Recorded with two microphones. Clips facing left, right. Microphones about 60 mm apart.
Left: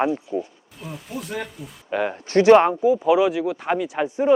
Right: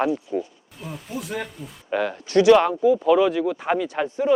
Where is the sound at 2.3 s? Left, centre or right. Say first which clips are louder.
Left 2 dB; left.